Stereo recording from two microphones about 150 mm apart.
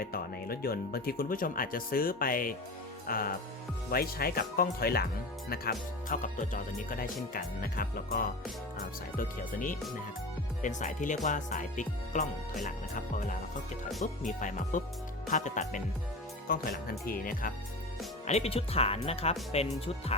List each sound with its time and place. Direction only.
0.0 s speech: 85° left
3.9 s speech: 90° left
5.5 s speech: 75° left (ahead or behind); by 6.6 s 60° left (ahead or behind)
6.9 s speech: 70° left (ahead or behind); by 15.8 s 55° left (ahead or behind)
16.5 s speech: 80° left
18.3 s speech: 45° left (ahead or behind)